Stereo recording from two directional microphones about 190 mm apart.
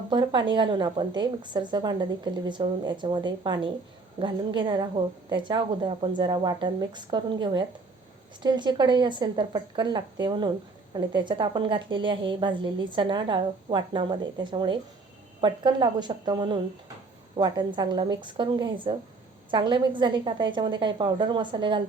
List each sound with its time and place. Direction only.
0.1 s a woman's voice: 25° right (ahead or behind)